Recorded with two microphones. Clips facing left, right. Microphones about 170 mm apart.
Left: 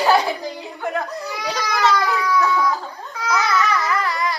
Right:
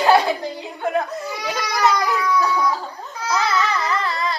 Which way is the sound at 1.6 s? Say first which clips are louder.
Even; 15° right (ahead or behind).